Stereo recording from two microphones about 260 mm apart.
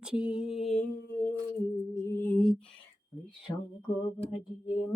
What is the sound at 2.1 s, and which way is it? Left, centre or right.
Lullaby, centre.